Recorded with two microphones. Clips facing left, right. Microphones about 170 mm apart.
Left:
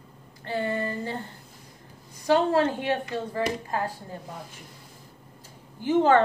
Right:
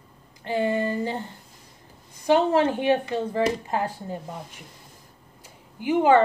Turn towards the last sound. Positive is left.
turn(degrees=-10)  # may be behind; listen again after turning